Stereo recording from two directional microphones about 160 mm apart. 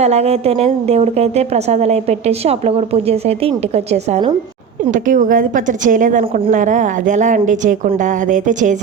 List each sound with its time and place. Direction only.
0.0 s a woman's voice: 40° right (ahead or behind)
4.9 s a woman's voice: 55° right (ahead or behind)